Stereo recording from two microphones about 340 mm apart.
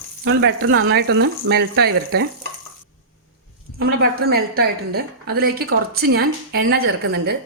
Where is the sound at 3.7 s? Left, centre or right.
Right.